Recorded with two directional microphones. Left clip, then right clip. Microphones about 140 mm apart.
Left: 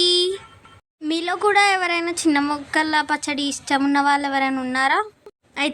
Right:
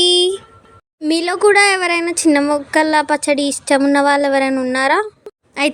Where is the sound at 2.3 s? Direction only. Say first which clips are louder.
Right 6 dB; 25° right (ahead or behind).